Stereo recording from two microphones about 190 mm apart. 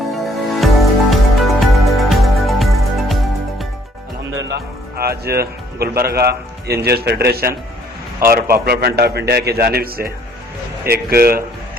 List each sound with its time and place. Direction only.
0.1 s music: centre (ahead or behind)
4.3 s music: 70° right (ahead or behind)
6.8 s a man's voice: 60° right (ahead or behind)